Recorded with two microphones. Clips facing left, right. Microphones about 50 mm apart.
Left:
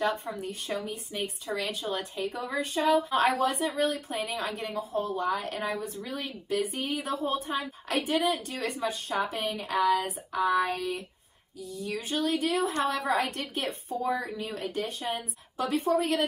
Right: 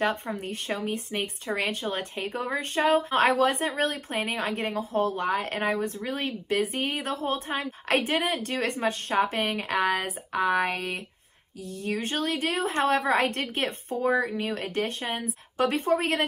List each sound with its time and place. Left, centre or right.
0.3 s a woman's voice: right
3.6 s a woman's voice: right
14.0 s a woman's voice: right